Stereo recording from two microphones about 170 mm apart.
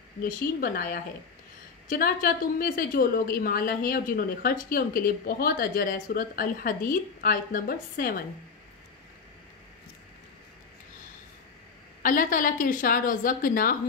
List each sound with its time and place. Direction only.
0.2 s a woman's voice: 55° left (ahead or behind)
12.0 s a woman's voice: 55° left (ahead or behind)